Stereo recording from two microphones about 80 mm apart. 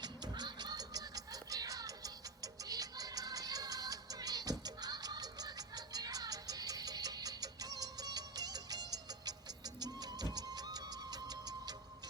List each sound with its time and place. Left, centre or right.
0.0 s music: right